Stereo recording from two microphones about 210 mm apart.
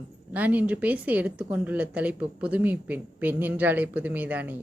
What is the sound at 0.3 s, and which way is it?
A woman's voice, 5° right (ahead or behind).